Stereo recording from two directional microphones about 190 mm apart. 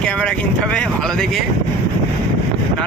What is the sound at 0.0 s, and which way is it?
Speech, 5° left (ahead or behind).